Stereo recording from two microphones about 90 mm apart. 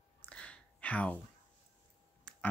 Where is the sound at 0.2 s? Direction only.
15° left (ahead or behind).